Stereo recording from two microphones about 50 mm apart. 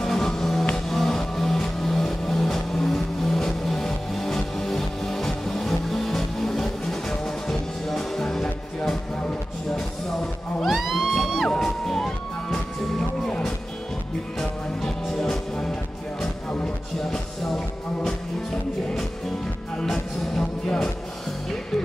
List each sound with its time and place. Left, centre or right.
0.0 s music: centre
10.6 s music: centre
11.4 s music: centre
14.4 s music: centre
16.6 s music: centre
19.8 s music: centre